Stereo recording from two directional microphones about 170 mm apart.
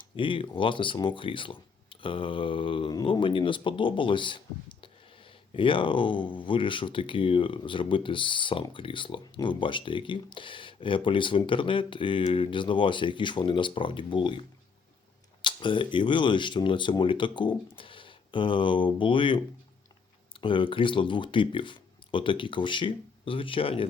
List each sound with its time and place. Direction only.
0.2 s speech: 30° left (ahead or behind)
20.4 s speech: 30° left (ahead or behind)